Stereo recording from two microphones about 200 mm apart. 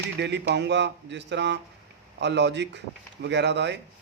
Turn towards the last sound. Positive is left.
turn(degrees=-60)  # may be behind; listen again after turning